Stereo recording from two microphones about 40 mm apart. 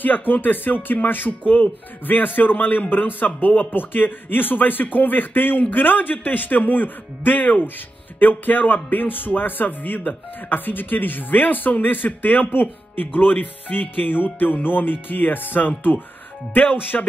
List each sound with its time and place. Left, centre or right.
0.0 s speech: left